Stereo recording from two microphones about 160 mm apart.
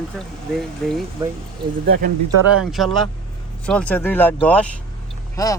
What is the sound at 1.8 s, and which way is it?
Speech, 60° right (ahead or behind).